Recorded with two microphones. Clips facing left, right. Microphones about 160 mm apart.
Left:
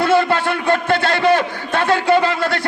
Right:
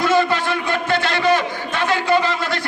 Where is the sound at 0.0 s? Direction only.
60° left (ahead or behind).